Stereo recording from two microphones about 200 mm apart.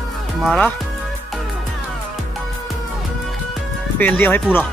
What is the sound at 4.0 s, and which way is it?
Speech, 10° left (ahead or behind).